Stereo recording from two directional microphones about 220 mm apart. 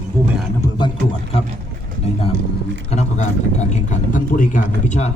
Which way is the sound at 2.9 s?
30° left (ahead or behind).